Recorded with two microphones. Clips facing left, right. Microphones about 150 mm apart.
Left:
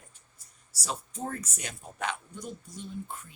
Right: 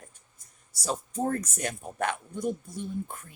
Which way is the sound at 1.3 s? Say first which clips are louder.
Right 7 dB; 50° right (ahead or behind).